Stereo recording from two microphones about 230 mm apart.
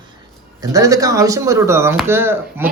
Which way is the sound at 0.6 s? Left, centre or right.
Centre.